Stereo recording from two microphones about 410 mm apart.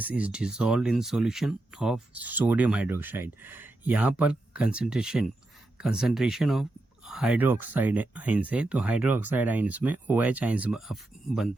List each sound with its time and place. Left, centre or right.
0.0 s speech: centre